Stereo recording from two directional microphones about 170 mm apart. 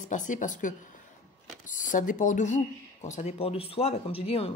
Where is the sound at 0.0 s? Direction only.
50° left (ahead or behind).